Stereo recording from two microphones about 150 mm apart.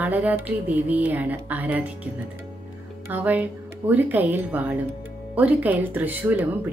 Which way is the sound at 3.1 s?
10° right (ahead or behind).